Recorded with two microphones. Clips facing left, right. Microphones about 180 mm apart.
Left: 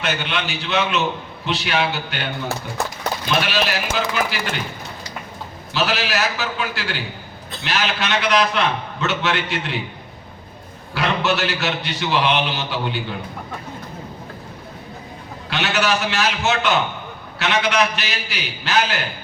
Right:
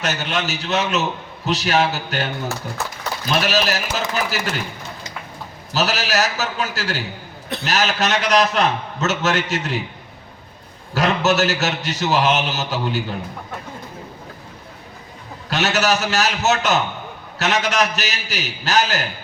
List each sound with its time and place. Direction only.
0.0 s a man's voice: 40° right (ahead or behind)
5.7 s a man's voice: 40° right (ahead or behind)
10.9 s a man's voice: 40° right (ahead or behind)
15.4 s a man's voice: 40° right (ahead or behind)